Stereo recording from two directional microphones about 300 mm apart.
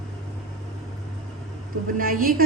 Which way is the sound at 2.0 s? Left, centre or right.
Right.